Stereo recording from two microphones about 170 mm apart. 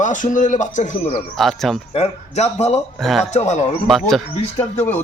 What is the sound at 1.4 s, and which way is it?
Speech, centre (ahead or behind).